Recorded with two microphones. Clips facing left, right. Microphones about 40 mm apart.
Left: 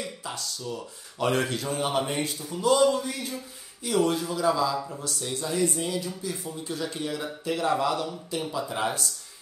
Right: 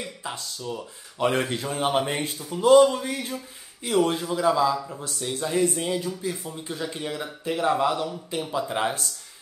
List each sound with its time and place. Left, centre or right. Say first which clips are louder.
0.0 s speech: right 1 dB; right
4.7 s speech: even; centre
5.0 s speech: right 2 dB; right